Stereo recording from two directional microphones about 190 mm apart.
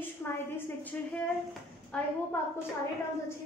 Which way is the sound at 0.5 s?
10° left (ahead or behind).